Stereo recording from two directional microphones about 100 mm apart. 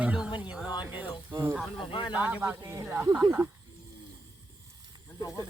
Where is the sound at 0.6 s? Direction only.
40° left (ahead or behind).